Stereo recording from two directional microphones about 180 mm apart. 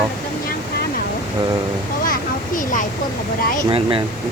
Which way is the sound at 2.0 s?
50° left (ahead or behind).